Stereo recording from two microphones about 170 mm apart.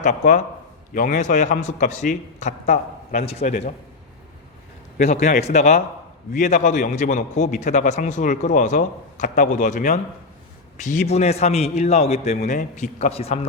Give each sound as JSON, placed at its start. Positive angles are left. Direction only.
{"t": 0.0, "sound": "a man's voice", "side_deg": 50}
{"t": 4.9, "sound": "a man's voice", "side_deg": 45}